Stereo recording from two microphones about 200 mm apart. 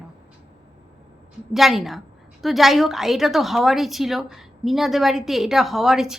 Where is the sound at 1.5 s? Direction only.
Centre (ahead or behind).